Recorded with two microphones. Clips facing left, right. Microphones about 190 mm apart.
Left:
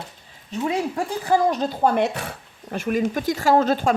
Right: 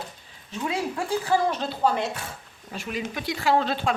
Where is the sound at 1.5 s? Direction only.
40° left (ahead or behind); by 2.3 s 65° left (ahead or behind).